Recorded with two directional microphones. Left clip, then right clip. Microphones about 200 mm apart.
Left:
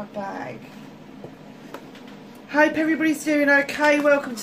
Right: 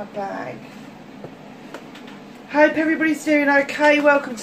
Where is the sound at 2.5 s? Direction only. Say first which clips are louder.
Right 3 dB; 50° left (ahead or behind).